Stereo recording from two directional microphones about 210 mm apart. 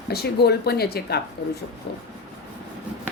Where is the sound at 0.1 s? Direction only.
50° left (ahead or behind).